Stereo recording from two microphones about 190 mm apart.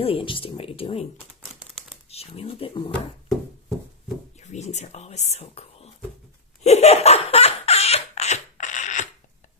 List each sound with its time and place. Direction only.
0.0 s speech: 30° left (ahead or behind)
2.0 s speech: 30° left (ahead or behind)
4.4 s speech: 35° left (ahead or behind)
6.6 s laughter: 35° left (ahead or behind)